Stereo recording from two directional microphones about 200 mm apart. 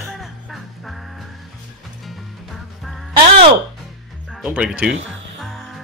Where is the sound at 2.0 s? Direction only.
Centre (ahead or behind).